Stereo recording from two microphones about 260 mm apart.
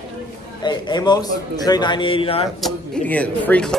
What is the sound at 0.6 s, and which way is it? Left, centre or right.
A man's voice, centre.